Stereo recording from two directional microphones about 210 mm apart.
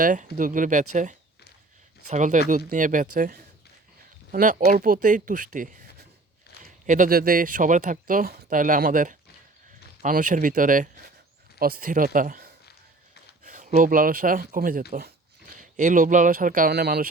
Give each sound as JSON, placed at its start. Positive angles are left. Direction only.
{"t": 0.0, "sound": "speech", "side_deg": -40}
{"t": 2.0, "sound": "speech", "side_deg": -35}